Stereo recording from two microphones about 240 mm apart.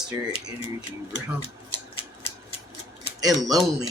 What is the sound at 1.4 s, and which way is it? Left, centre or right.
Scissors, left.